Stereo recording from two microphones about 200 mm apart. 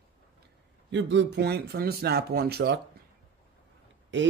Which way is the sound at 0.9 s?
65° right (ahead or behind).